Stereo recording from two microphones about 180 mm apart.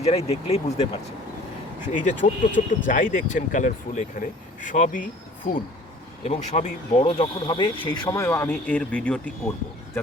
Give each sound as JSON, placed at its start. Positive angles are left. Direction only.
{"t": 0.0, "sound": "speech", "side_deg": 35}
{"t": 1.9, "sound": "speech", "side_deg": 45}
{"t": 6.2, "sound": "speech", "side_deg": 40}